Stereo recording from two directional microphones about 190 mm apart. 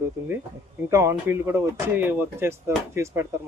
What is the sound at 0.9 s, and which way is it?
Speech, 15° right (ahead or behind).